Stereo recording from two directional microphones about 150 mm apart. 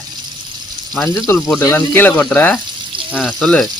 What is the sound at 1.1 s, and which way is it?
Speech, 20° left (ahead or behind).